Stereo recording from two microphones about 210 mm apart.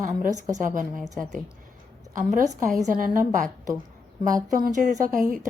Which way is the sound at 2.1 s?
40° right (ahead or behind).